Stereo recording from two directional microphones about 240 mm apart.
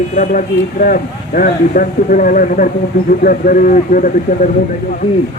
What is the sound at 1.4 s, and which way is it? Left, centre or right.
A man's voice, left.